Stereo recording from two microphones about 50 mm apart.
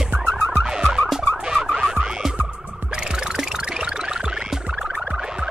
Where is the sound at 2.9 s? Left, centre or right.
Centre.